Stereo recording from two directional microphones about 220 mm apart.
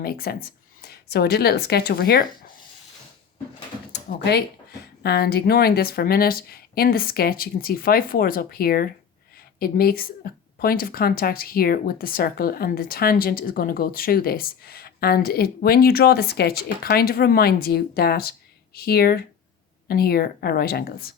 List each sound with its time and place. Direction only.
0.0 s speech: 45° left (ahead or behind)
3.9 s speech: 50° left (ahead or behind)